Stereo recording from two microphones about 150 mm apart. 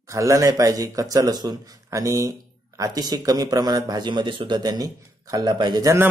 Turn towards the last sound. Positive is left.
turn(degrees=-20)  # may be behind; listen again after turning